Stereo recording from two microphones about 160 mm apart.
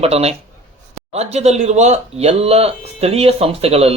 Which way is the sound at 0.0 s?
40° right (ahead or behind).